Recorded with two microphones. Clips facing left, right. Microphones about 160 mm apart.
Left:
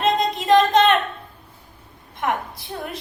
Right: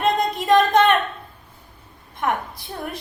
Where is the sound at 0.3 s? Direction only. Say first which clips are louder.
Left 2 dB; 25° left (ahead or behind).